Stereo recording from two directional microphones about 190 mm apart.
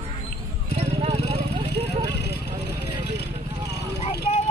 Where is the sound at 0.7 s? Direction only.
35° right (ahead or behind).